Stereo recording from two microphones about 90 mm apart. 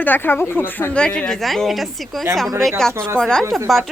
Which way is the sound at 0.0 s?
20° left (ahead or behind).